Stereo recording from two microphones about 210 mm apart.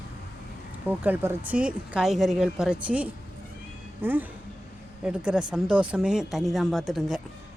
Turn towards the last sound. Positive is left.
turn(degrees=0)  # may be behind; listen again after turning